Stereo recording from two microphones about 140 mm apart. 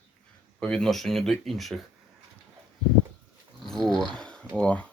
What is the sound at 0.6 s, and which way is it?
Speech, 5° left (ahead or behind).